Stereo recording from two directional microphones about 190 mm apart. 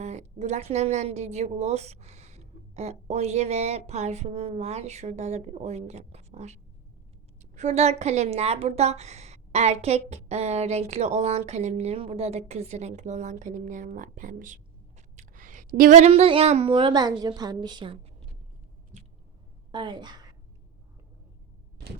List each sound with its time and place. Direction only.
0.0 s a woman's voice: 35° right (ahead or behind)
19.7 s a woman's voice: 25° right (ahead or behind)